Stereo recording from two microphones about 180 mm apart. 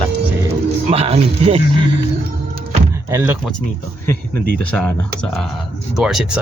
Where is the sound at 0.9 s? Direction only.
35° right (ahead or behind).